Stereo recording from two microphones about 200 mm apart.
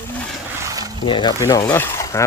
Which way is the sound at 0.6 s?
20° right (ahead or behind).